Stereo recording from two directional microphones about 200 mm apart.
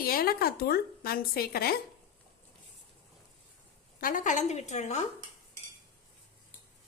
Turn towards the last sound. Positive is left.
turn(degrees=35)  # may be behind; listen again after turning